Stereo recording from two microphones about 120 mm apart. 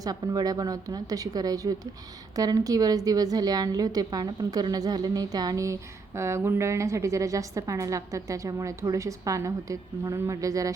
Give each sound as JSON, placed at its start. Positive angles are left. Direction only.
{"t": 0.0, "sound": "a woman's voice", "side_deg": -30}